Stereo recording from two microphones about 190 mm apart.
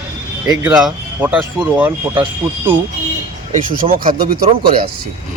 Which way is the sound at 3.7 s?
45° right (ahead or behind).